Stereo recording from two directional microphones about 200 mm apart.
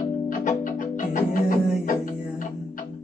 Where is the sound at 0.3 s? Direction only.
40° left (ahead or behind).